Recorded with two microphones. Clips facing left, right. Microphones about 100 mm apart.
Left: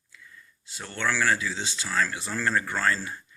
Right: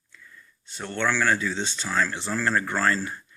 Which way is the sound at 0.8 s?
30° right (ahead or behind).